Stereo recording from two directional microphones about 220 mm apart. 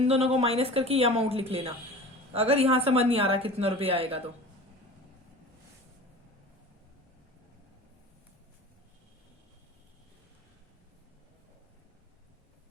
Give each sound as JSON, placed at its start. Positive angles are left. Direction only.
{"t": 0.0, "sound": "speech", "side_deg": -30}